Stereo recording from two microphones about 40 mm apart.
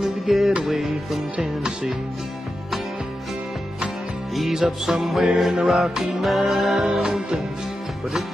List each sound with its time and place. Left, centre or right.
0.0 s music: centre
1.3 s music: centre
4.4 s music: centre